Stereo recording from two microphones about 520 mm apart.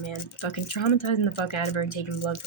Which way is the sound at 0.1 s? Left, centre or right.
Left.